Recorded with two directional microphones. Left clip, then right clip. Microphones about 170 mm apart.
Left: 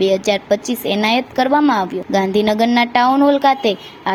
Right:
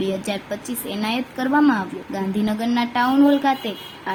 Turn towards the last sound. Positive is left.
turn(degrees=35)  # may be behind; listen again after turning